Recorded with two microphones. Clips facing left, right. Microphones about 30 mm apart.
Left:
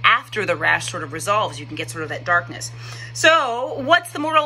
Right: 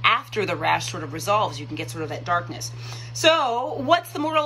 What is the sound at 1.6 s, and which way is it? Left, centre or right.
Speech, left.